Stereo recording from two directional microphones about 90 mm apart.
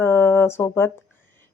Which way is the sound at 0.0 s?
25° left (ahead or behind).